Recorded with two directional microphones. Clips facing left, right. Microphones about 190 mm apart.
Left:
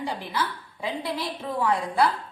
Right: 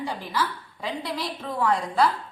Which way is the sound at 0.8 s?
10° left (ahead or behind).